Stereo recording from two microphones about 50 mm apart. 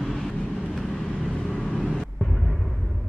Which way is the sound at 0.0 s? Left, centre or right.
Centre.